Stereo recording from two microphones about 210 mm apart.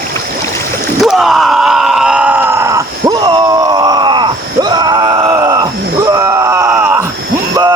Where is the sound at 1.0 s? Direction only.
Centre (ahead or behind).